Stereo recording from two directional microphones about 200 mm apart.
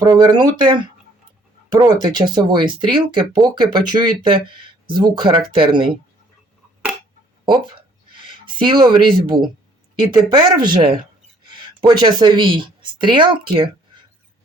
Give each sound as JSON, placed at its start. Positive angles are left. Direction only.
{"t": 0.0, "sound": "speech", "side_deg": -20}
{"t": 7.4, "sound": "a sound", "side_deg": -25}
{"t": 9.9, "sound": "speech", "side_deg": -20}